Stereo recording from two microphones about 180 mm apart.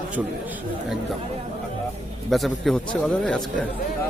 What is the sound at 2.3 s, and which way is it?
Speech, centre (ahead or behind).